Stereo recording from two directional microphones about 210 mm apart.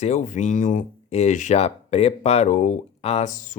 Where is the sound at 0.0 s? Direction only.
35° left (ahead or behind).